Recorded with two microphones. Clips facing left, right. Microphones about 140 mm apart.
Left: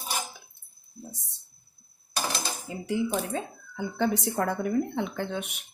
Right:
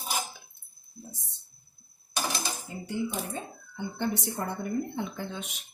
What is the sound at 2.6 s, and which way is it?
Speech, 90° left.